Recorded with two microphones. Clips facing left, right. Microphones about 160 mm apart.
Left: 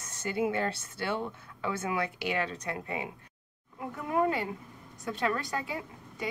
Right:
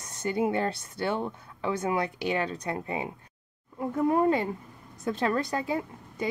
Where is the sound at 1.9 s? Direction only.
30° right (ahead or behind).